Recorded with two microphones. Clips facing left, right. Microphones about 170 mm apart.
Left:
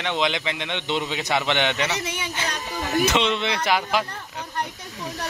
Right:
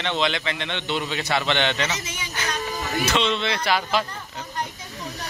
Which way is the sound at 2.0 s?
60° left (ahead or behind).